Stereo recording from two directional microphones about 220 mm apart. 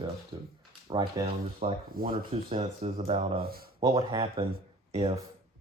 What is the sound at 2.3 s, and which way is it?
Speech, 25° right (ahead or behind).